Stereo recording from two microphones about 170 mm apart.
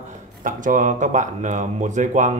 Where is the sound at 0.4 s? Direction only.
50° right (ahead or behind).